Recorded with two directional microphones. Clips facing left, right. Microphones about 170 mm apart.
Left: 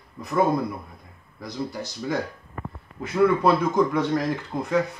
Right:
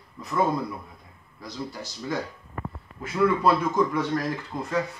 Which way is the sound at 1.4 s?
15° left (ahead or behind).